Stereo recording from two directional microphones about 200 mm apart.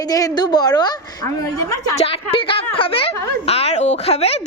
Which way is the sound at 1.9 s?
30° left (ahead or behind).